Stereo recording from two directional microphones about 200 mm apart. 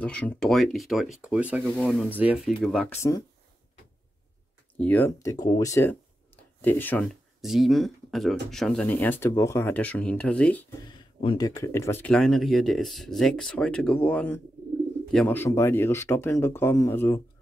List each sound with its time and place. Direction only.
0.0 s speech: 5° left (ahead or behind)
3.0 s speech: 20° left (ahead or behind)
4.7 s speech: 10° left (ahead or behind)
11.3 s speech: 15° left (ahead or behind)